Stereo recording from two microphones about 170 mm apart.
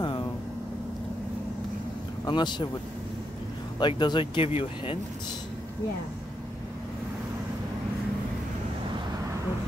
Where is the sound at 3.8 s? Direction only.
25° left (ahead or behind).